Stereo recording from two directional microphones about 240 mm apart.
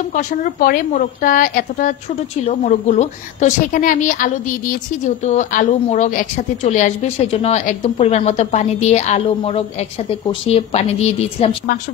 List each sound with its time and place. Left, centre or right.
0.1 s a woman's voice: left